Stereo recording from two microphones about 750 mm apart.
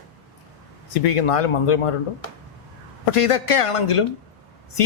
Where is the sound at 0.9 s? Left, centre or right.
Left.